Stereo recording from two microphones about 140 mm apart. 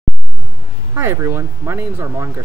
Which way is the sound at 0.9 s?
20° right (ahead or behind).